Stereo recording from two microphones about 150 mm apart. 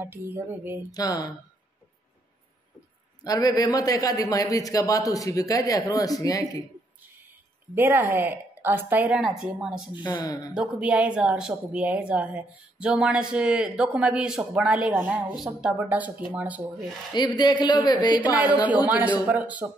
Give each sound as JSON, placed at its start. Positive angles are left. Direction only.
{"t": 0.0, "sound": "speech", "side_deg": -15}
{"t": 0.9, "sound": "a man's voice", "side_deg": 25}
{"t": 3.3, "sound": "a man's voice", "side_deg": 25}
{"t": 7.7, "sound": "a woman's voice", "side_deg": -15}
{"t": 10.0, "sound": "a man's voice", "side_deg": 25}
{"t": 10.5, "sound": "a woman's voice", "side_deg": -5}
{"t": 17.1, "sound": "a man's voice", "side_deg": 30}
{"t": 18.9, "sound": "speech", "side_deg": -10}